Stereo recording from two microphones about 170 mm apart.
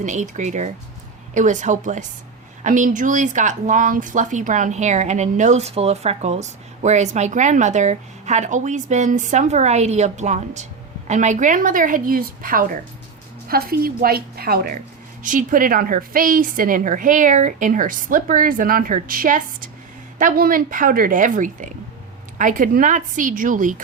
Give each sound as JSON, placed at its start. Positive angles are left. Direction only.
{"t": 0.0, "sound": "a woman's voice", "side_deg": -45}
{"t": 15.2, "sound": "speech", "side_deg": -50}